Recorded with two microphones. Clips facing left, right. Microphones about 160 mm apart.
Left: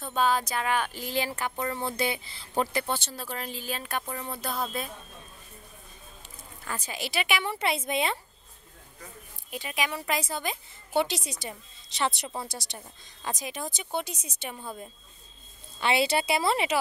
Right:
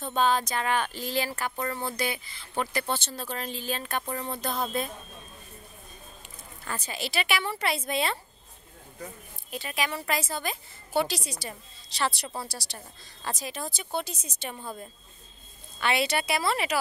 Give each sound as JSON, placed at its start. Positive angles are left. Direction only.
{"t": 0.0, "sound": "speech", "side_deg": 5}
{"t": 2.8, "sound": "speech", "side_deg": 10}
{"t": 6.6, "sound": "speech", "side_deg": 10}
{"t": 9.5, "sound": "a woman's voice", "side_deg": 15}
{"t": 15.8, "sound": "a woman's voice", "side_deg": 25}